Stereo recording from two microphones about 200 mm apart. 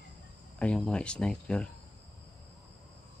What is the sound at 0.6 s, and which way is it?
Speech, 5° left (ahead or behind).